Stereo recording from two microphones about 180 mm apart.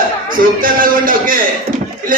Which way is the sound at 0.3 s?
50° right (ahead or behind).